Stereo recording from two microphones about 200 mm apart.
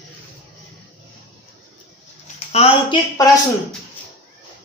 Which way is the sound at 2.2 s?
30° left (ahead or behind).